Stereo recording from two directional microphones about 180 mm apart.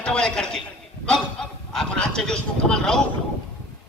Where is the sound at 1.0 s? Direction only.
5° left (ahead or behind).